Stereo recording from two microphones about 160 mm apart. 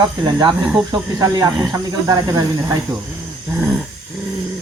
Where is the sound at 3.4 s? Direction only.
10° right (ahead or behind).